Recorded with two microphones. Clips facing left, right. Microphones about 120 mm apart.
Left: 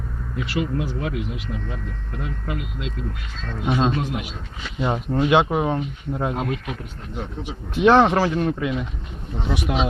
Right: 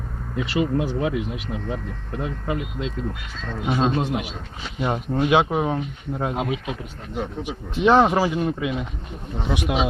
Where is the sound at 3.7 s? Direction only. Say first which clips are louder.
Left 1 dB; 5° right (ahead or behind).